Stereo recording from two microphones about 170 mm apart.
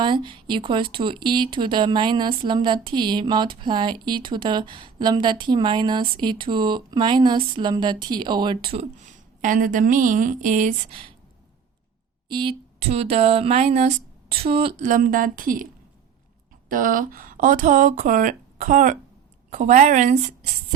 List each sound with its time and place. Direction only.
0.0 s speech: 30° right (ahead or behind)
9.0 s speech: 50° right (ahead or behind)
12.3 s speech: 30° right (ahead or behind)
14.8 s speech: 50° right (ahead or behind)
16.6 s speech: 55° right (ahead or behind)